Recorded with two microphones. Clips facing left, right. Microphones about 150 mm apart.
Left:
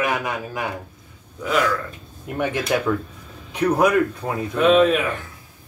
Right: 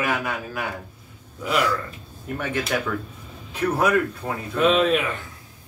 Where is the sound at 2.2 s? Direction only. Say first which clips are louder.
Left 4 dB; 15° left (ahead or behind).